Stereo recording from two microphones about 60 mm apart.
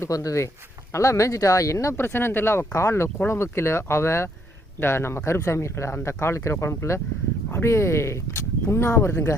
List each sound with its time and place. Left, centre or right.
0.1 s speech: left
0.9 s speech: left
2.0 s speech: left